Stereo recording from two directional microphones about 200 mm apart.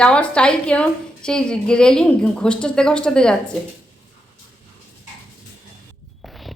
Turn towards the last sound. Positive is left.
turn(degrees=0)  # may be behind; listen again after turning